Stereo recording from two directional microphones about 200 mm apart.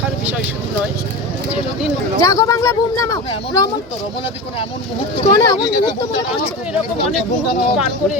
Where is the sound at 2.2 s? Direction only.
15° left (ahead or behind).